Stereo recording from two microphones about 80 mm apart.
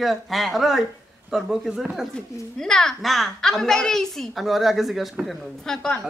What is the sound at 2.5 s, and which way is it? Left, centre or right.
A woman's voice, centre.